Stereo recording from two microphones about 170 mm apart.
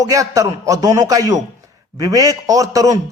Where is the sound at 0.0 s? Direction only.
20° right (ahead or behind).